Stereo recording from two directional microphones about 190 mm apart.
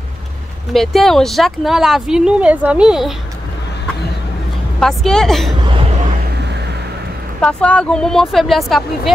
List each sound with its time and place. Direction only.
0.7 s speech: centre (ahead or behind)
4.7 s speech: 5° left (ahead or behind)
5.6 s chuckle: 25° right (ahead or behind)
6.3 s music: 65° right (ahead or behind)
7.4 s speech: 5° left (ahead or behind)